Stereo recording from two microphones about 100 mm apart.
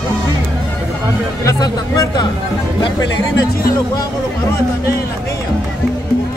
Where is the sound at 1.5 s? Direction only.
30° left (ahead or behind).